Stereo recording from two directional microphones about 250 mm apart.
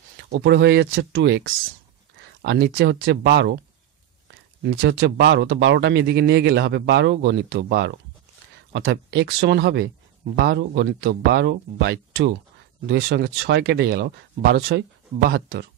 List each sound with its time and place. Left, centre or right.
0.3 s speech: right
4.6 s speech: right